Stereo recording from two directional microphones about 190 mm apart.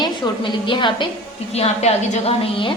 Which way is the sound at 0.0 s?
25° left (ahead or behind).